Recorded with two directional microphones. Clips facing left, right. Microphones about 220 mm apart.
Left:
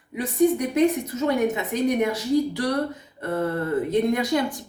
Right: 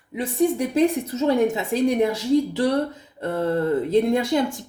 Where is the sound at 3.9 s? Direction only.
30° right (ahead or behind).